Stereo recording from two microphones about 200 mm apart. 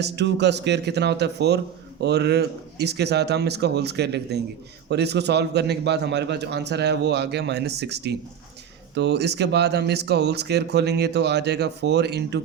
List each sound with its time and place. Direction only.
0.0 s a man's voice: 60° right (ahead or behind)